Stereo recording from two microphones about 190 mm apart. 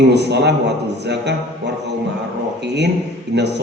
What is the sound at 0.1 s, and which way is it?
A man's voice, 65° right (ahead or behind).